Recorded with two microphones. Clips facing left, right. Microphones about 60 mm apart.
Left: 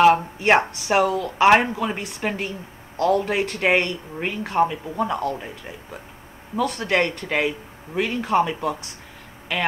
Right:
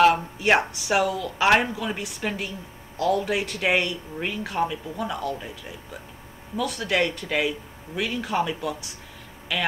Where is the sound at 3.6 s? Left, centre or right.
Left.